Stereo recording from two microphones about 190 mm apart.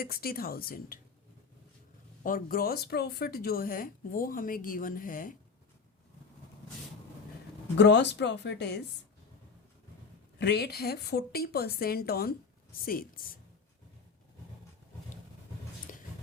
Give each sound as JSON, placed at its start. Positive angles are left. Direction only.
{"t": 0.0, "sound": "speech", "side_deg": 55}
{"t": 2.2, "sound": "speech", "side_deg": 50}
{"t": 7.8, "sound": "a woman's voice", "side_deg": 65}
{"t": 10.3, "sound": "a woman's voice", "side_deg": 60}